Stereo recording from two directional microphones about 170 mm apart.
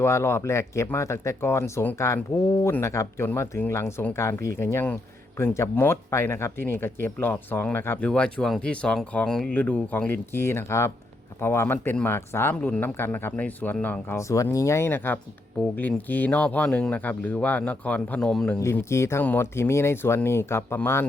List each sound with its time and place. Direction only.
0.0 s speech: 15° left (ahead or behind)
18.6 s speech: 15° left (ahead or behind)